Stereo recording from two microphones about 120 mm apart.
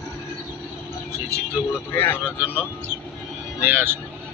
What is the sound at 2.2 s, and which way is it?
Speech, 15° right (ahead or behind).